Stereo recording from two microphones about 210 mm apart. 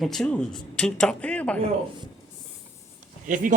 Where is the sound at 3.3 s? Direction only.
40° right (ahead or behind).